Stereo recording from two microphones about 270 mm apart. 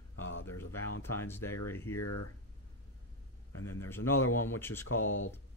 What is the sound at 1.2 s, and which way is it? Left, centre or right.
Speech, centre.